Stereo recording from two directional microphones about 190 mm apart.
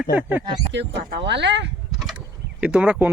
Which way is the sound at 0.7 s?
65° right (ahead or behind).